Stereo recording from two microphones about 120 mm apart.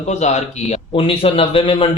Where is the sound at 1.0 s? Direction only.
50° left (ahead or behind).